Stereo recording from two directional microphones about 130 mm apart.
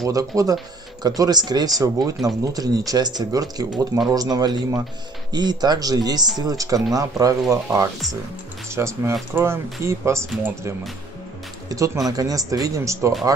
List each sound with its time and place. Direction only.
0.0 s speech: 25° right (ahead or behind)
11.7 s speech: 25° right (ahead or behind)